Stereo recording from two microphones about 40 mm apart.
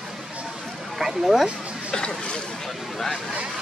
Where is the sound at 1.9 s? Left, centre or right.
Left.